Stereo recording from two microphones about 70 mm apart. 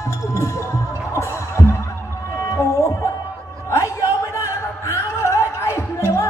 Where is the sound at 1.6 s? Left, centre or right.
Left.